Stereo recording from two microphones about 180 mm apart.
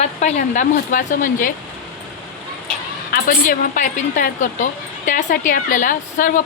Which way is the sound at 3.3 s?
45° left (ahead or behind).